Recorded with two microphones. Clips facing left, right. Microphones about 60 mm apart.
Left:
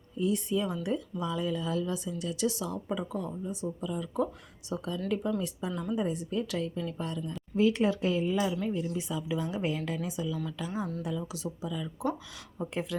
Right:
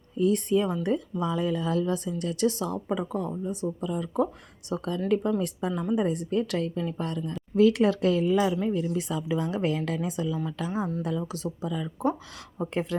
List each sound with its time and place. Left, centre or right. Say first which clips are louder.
0.2 s a woman's voice: right 6 dB; right
10.7 s speech: right 6 dB; right
11.2 s speech: right 4 dB; right